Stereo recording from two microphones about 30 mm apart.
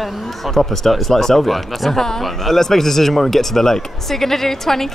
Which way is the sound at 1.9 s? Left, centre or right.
Centre.